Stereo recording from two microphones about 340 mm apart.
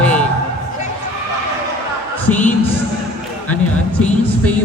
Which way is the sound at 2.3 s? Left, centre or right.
Centre.